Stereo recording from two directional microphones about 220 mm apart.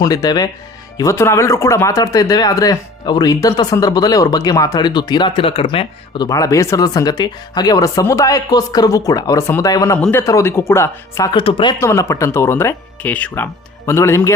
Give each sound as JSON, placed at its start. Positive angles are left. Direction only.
{"t": 0.0, "sound": "speech", "side_deg": 15}